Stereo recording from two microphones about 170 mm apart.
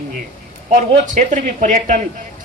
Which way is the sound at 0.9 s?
45° right (ahead or behind).